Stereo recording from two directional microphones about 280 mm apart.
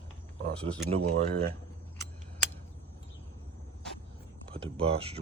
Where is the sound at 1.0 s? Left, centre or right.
Right.